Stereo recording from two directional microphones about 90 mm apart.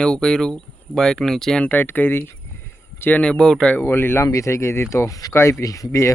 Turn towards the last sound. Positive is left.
turn(degrees=35)  # may be behind; listen again after turning